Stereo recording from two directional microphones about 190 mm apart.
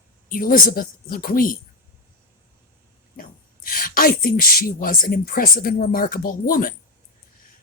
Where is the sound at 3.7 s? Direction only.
50° left (ahead or behind).